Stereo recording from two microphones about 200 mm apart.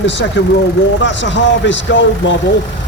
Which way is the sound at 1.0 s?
65° left (ahead or behind).